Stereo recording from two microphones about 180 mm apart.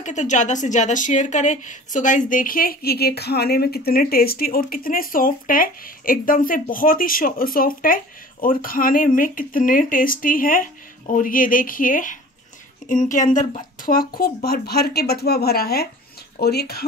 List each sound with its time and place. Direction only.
0.0 s speech: 40° left (ahead or behind); by 16.8 s 60° left (ahead or behind)